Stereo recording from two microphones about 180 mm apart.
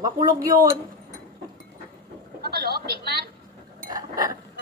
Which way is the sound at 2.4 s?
60° right (ahead or behind).